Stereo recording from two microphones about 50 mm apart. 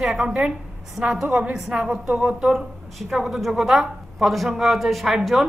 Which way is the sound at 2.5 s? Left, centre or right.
Centre.